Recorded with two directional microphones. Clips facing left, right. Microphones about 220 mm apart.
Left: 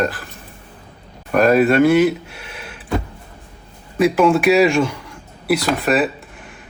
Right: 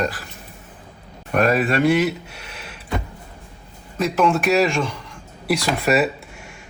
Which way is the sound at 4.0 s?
Centre (ahead or behind).